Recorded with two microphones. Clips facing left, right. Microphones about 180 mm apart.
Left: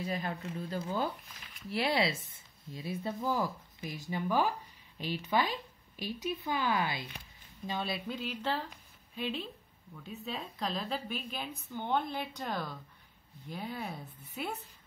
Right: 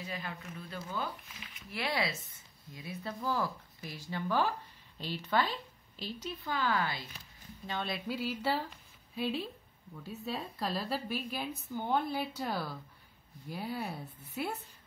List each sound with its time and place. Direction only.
0.0 s speech: 40° left (ahead or behind); by 7.8 s 15° left (ahead or behind)
7.8 s a woman's voice: 5° left (ahead or behind)
8.2 s a woman's voice: 10° right (ahead or behind)